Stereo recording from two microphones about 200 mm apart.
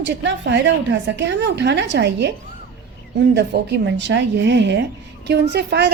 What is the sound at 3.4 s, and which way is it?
A woman's voice, 60° right (ahead or behind).